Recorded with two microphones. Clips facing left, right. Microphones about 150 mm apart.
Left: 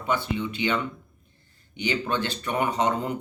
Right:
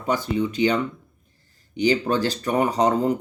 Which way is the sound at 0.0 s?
40° right (ahead or behind).